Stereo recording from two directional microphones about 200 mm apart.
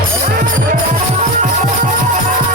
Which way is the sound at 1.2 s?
40° right (ahead or behind).